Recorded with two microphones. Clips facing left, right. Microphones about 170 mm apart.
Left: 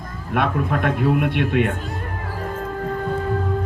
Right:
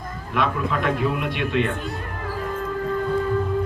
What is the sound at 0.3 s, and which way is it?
A man's voice, 55° left (ahead or behind).